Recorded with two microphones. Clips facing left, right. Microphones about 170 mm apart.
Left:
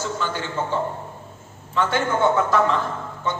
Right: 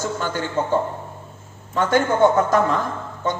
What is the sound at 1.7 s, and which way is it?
A man's voice, 45° right (ahead or behind).